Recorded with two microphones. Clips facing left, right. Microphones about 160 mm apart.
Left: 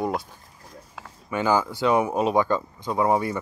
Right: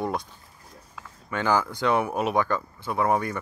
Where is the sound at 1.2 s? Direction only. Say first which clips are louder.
Left 2 dB; 15° left (ahead or behind).